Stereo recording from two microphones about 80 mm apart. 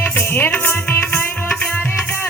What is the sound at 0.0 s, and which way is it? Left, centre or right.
Music, left.